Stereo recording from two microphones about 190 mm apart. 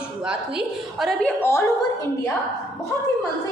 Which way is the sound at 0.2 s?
5° right (ahead or behind).